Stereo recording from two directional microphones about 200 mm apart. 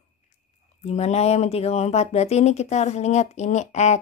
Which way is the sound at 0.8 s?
35° left (ahead or behind).